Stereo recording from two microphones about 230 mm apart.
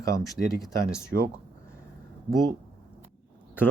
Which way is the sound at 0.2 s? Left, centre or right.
Centre.